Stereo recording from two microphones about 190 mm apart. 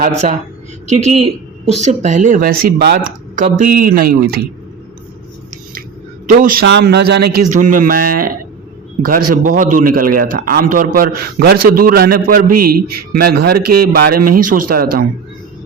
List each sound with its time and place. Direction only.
0.0 s a man's voice: 40° right (ahead or behind)
6.4 s speech: 60° right (ahead or behind)
7.5 s a man's voice: 45° right (ahead or behind)